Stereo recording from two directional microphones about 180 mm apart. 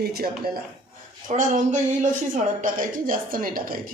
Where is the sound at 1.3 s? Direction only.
40° right (ahead or behind).